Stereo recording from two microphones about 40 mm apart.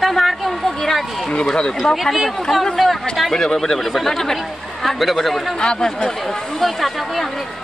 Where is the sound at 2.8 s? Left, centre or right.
Centre.